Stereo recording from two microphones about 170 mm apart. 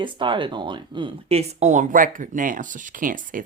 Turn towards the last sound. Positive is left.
turn(degrees=-55)  # may be behind; listen again after turning